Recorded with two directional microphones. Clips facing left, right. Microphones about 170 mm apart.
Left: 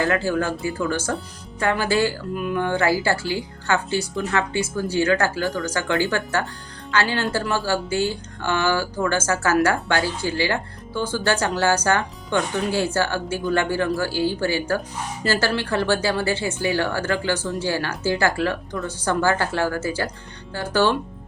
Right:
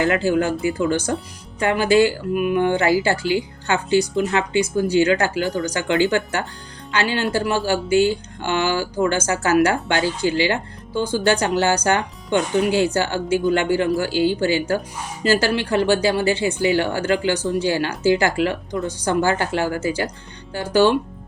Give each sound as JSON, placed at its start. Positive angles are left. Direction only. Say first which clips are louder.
{"t": 0.0, "sound": "speech", "louder": "right 3 dB", "side_deg": -20}